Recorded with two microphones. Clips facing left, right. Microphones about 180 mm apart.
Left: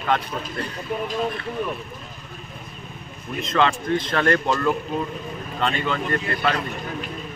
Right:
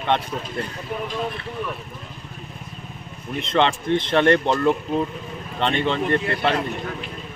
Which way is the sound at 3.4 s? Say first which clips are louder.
Right 1 dB; 25° right (ahead or behind).